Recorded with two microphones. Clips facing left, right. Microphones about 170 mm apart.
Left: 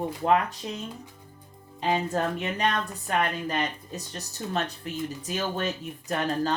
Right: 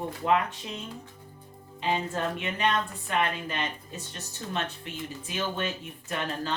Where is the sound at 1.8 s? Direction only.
40° left (ahead or behind).